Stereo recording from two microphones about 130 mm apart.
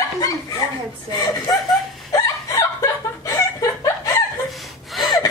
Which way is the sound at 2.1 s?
25° left (ahead or behind).